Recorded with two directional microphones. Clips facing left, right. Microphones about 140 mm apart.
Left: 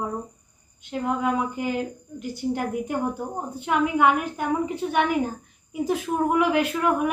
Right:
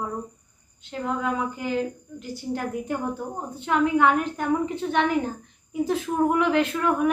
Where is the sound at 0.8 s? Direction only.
15° left (ahead or behind).